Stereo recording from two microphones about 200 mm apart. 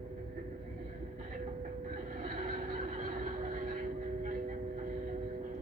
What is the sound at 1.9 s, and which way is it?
Vehicle, 40° right (ahead or behind).